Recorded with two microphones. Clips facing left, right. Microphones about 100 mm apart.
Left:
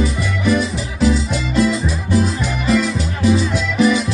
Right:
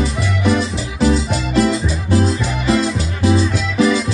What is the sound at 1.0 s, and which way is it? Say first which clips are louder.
Music: right 1 dB; 30° right (ahead or behind).